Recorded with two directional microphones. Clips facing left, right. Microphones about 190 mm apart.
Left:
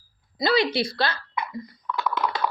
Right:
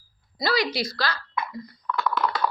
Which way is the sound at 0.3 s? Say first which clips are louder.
Left 3 dB; 25° left (ahead or behind).